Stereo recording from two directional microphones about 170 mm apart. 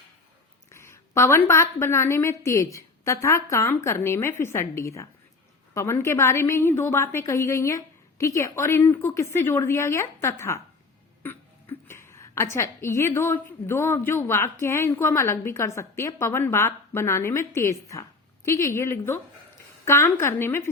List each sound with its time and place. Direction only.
0.7 s a woman's voice: 15° left (ahead or behind)
11.7 s a woman's voice: 15° left (ahead or behind)